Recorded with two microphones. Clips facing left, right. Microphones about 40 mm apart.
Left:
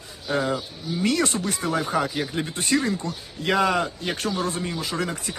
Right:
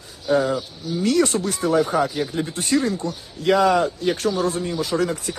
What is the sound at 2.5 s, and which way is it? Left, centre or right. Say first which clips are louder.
Speech: right 1 dB; left.